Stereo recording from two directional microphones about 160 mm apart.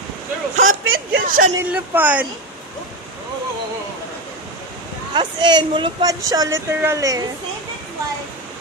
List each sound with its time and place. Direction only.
0.6 s a sound: 55° right (ahead or behind)
1.5 s speech: 15° right (ahead or behind)
5.1 s speech: 30° right (ahead or behind)